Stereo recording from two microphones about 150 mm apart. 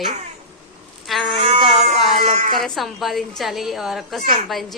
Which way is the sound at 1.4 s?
45° right (ahead or behind).